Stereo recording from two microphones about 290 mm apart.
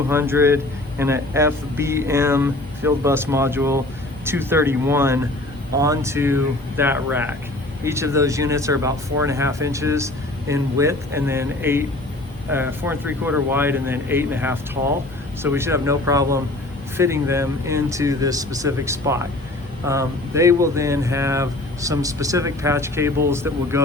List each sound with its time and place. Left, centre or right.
0.1 s speech: centre